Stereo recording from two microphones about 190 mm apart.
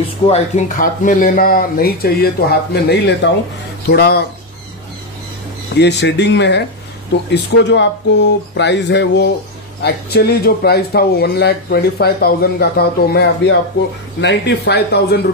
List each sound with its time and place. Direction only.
0.3 s speech: 45° left (ahead or behind)
5.8 s speech: 65° left (ahead or behind)